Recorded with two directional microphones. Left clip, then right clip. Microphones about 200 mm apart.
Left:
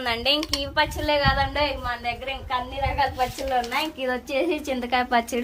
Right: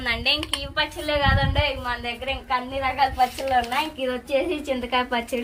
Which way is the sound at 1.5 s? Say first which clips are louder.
Even; 10° left (ahead or behind).